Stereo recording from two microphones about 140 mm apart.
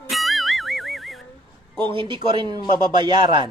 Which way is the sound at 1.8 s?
35° right (ahead or behind).